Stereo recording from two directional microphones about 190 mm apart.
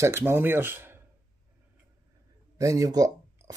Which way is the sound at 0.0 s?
15° right (ahead or behind).